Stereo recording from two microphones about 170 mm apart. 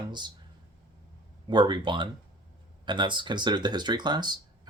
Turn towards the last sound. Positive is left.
turn(degrees=-25)  # may be behind; listen again after turning